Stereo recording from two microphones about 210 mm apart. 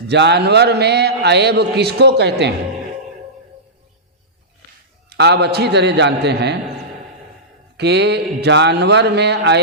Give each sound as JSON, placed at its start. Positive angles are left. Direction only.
{"t": 0.1, "sound": "a man's voice", "side_deg": -55}
{"t": 5.0, "sound": "a man's voice", "side_deg": -55}
{"t": 7.8, "sound": "a man's voice", "side_deg": -55}